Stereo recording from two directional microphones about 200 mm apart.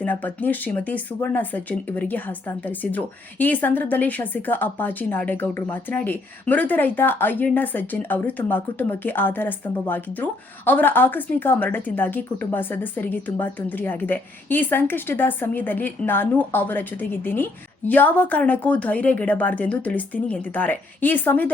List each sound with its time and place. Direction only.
0.0 s speech: 10° left (ahead or behind)